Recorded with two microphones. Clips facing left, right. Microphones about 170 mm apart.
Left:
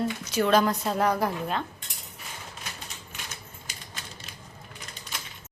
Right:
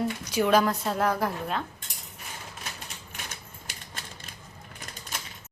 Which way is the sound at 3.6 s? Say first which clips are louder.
Right 1 dB; 55° right (ahead or behind).